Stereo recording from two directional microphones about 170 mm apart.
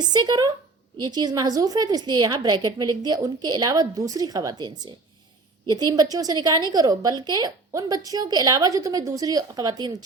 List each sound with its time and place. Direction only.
0.1 s a woman's voice: 25° right (ahead or behind)